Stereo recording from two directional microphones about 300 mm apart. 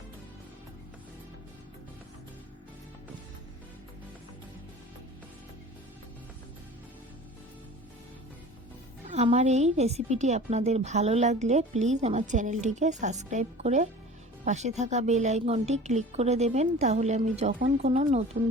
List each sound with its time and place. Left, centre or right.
9.0 s a woman's voice: right